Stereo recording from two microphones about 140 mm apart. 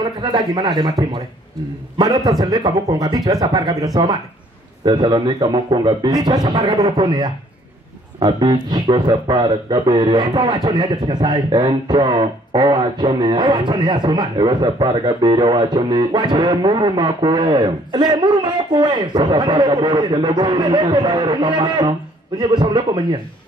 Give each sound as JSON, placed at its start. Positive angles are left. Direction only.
{"t": 0.2, "sound": "a man's voice", "side_deg": -30}